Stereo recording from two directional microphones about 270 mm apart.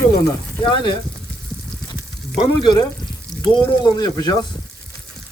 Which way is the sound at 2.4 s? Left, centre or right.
Centre.